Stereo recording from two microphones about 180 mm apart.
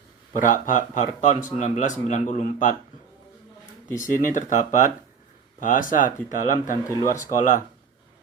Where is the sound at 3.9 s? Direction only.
45° left (ahead or behind).